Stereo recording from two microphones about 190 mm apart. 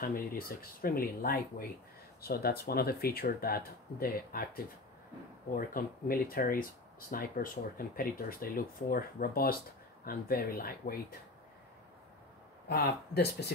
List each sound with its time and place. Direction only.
0.0 s speech: 50° left (ahead or behind)
5.5 s speech: 50° left (ahead or behind)
12.6 s speech: 60° left (ahead or behind)